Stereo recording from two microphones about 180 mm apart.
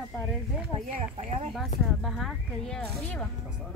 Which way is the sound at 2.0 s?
Centre (ahead or behind).